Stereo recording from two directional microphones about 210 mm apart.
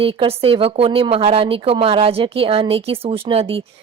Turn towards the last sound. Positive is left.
turn(degrees=-25)  # may be behind; listen again after turning